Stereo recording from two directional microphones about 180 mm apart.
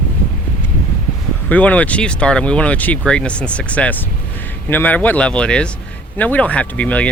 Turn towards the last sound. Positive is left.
turn(degrees=10)  # may be behind; listen again after turning